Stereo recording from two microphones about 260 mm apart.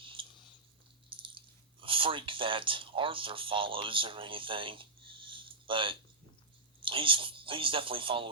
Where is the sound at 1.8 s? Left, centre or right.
Centre.